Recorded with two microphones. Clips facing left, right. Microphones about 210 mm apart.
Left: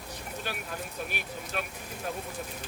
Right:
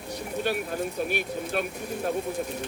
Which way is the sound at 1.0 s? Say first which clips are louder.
Right 9 dB; 45° right (ahead or behind).